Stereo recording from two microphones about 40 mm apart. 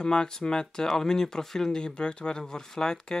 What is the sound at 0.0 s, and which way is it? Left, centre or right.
Speech, left.